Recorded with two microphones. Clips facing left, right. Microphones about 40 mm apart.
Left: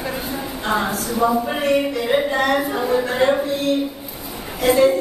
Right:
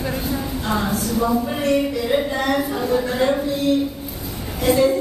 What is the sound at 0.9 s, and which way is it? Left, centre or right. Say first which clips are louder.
A woman's voice: left 1 dB; centre.